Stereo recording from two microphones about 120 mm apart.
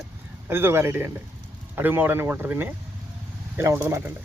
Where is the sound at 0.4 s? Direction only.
20° right (ahead or behind).